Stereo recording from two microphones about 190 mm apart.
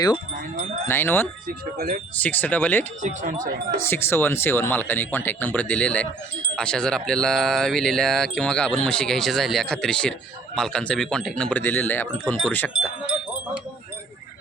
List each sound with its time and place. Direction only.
0.5 s speech: 45° right (ahead or behind)
0.9 s speech: 10° left (ahead or behind)
1.5 s speech: 50° right (ahead or behind)
2.2 s speech: 10° left (ahead or behind)
3.0 s speech: 45° right (ahead or behind)
3.8 s speech: 10° left (ahead or behind)